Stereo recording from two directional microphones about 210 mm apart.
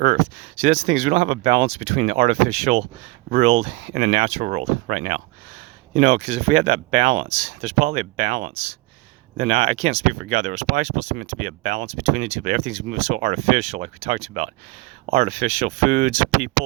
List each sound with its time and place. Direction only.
0.0 s speech: 35° right (ahead or behind)
9.4 s speech: 30° right (ahead or behind)